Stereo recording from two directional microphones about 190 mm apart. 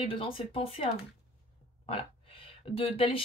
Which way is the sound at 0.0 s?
30° left (ahead or behind).